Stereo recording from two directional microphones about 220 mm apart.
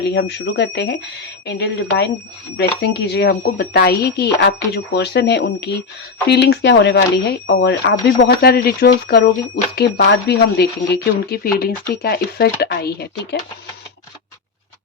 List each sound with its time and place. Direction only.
0.0 s speech: 50° left (ahead or behind)